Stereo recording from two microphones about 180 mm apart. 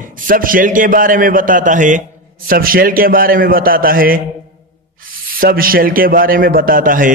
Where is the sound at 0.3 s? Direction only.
50° right (ahead or behind).